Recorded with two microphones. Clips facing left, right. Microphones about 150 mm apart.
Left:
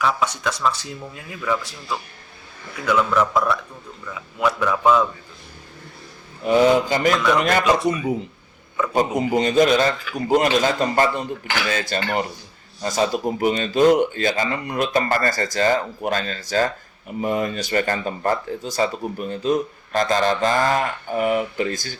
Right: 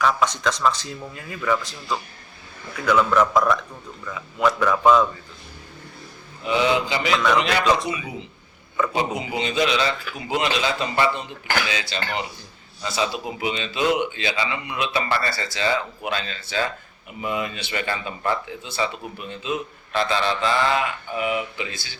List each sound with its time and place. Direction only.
0.0 s speech: 10° left (ahead or behind)
6.4 s speech: 45° left (ahead or behind)
8.9 s speech: 45° left (ahead or behind)